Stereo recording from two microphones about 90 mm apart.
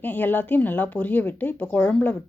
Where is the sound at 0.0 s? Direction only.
20° left (ahead or behind).